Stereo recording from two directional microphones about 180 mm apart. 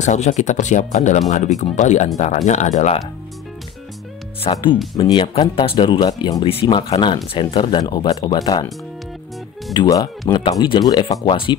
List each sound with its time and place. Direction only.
0.0 s speech: 40° left (ahead or behind)
4.5 s speech: 25° left (ahead or behind)
9.8 s speech: 20° left (ahead or behind)